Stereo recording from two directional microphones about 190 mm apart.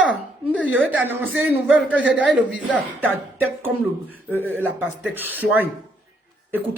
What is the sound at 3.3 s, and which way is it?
Speech, 10° right (ahead or behind).